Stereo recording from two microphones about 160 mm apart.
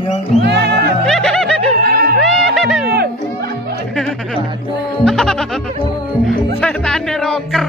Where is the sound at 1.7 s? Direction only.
70° right (ahead or behind).